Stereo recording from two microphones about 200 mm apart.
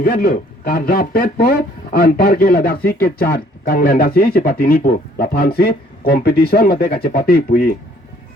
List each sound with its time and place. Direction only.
0.0 s speech: 50° left (ahead or behind)